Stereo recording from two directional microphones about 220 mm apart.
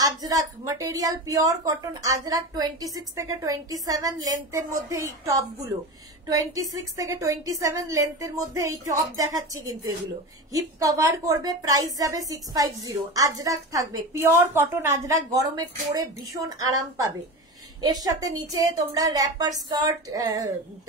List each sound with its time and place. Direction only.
0.0 s a woman's voice: 15° right (ahead or behind)